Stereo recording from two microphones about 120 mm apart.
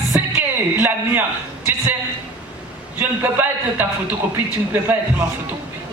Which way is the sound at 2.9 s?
15° right (ahead or behind).